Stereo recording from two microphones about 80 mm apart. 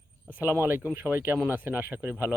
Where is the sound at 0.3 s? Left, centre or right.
Right.